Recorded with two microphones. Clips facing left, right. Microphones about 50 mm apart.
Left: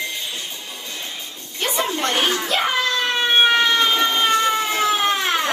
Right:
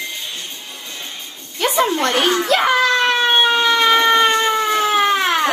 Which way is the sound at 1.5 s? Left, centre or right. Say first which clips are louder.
Right 6 dB; right.